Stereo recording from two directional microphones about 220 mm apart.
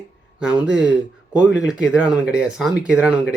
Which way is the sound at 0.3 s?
5° right (ahead or behind).